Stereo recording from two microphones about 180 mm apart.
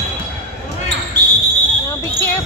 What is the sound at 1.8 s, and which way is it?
Basketball bounce, 15° left (ahead or behind).